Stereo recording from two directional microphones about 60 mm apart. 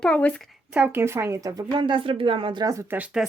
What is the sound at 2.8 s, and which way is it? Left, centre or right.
Speech, right.